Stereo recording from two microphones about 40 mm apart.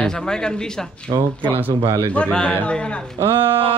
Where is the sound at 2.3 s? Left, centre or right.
Left.